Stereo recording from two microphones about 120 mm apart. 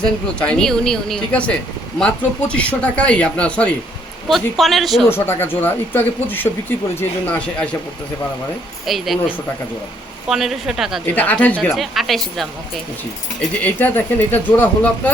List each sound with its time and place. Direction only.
0.0 s speech: 5° left (ahead or behind)
5.0 s speech: 20° left (ahead or behind)
8.9 s speech: centre (ahead or behind)
10.2 s speech: centre (ahead or behind)
11.0 s speech: 15° left (ahead or behind)
11.7 s speech: centre (ahead or behind)
13.6 s speech: 15° left (ahead or behind)